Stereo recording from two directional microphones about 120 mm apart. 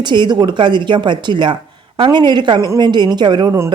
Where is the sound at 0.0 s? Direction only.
40° right (ahead or behind).